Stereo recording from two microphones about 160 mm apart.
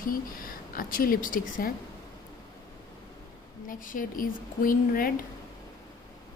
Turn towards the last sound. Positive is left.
turn(degrees=60)  # may be behind; listen again after turning